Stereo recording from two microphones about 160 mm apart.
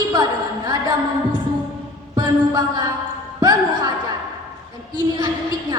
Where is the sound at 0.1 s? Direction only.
25° right (ahead or behind).